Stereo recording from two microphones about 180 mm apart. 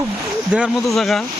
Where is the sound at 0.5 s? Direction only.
5° right (ahead or behind).